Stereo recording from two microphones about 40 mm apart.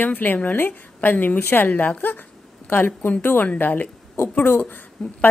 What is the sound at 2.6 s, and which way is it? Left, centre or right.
Speech, left.